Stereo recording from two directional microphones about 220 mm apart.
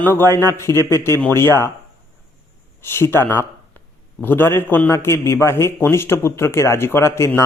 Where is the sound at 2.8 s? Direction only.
10° left (ahead or behind).